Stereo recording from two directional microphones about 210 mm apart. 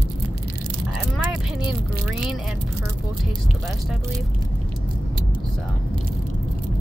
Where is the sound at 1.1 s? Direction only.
Centre (ahead or behind).